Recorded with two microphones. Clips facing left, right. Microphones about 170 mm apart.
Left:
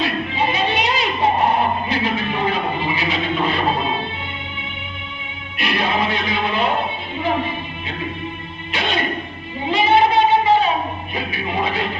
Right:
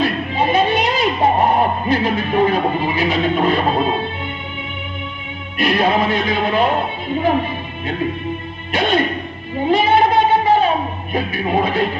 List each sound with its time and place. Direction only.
0.0 s music: 50° right (ahead or behind)
5.5 s music: 45° right (ahead or behind)
8.7 s music: 50° right (ahead or behind)
9.6 s a sound: 50° right (ahead or behind)
11.1 s music: 50° right (ahead or behind)